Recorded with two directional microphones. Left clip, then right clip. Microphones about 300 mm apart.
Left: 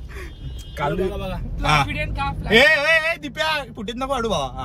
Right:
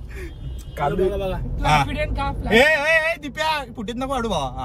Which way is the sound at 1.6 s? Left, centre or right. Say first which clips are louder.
Even; centre.